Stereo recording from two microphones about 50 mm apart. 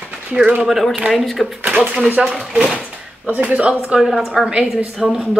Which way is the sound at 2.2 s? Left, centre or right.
Centre.